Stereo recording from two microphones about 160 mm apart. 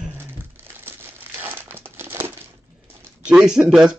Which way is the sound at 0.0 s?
15° right (ahead or behind).